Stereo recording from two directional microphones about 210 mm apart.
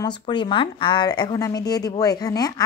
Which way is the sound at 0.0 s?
20° left (ahead or behind).